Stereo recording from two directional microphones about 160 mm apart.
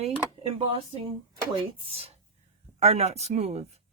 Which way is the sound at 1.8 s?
35° right (ahead or behind).